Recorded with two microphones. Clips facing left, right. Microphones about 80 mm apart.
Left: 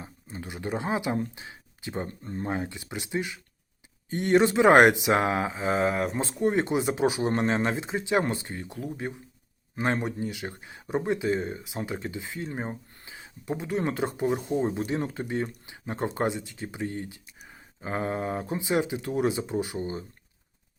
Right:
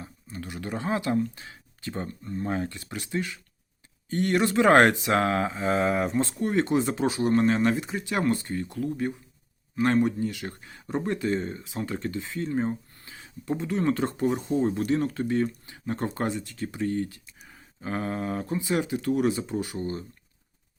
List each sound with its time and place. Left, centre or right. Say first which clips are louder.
0.0 s a sound: right 1 dB; left
1.4 s speech: left 1 dB; centre
2.0 s speech: right 2 dB; left
2.5 s speech: right 1 dB; centre
6.1 s speech: even; left